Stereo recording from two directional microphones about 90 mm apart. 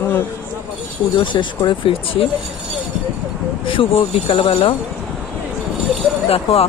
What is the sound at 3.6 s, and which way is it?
Speech, 80° left.